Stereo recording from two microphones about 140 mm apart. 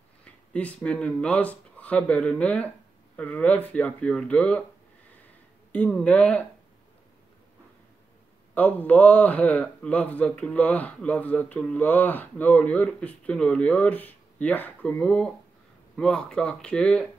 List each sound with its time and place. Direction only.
0.2 s a man's voice: 10° left (ahead or behind)
5.7 s a man's voice: 5° left (ahead or behind)
8.5 s a man's voice: 10° left (ahead or behind)